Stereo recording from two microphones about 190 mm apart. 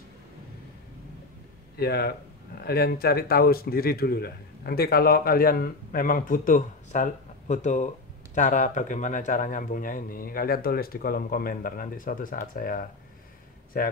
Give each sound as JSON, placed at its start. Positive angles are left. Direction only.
{"t": 1.8, "sound": "speech", "side_deg": 55}